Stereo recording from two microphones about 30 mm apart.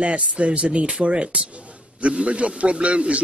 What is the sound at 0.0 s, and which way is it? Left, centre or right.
A man's voice, right.